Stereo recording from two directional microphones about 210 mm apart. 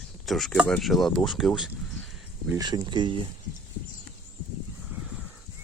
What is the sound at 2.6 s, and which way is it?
Speech, 20° right (ahead or behind).